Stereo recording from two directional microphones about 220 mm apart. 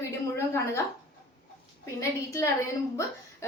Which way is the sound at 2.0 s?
10° left (ahead or behind).